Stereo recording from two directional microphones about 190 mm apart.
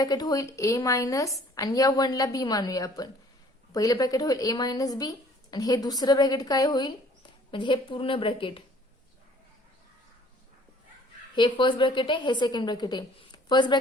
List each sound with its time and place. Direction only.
0.0 s a woman's voice: 20° left (ahead or behind)
11.3 s speech: 25° left (ahead or behind)